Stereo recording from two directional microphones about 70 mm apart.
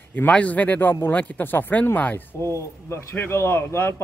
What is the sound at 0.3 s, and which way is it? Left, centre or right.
A man's voice, centre.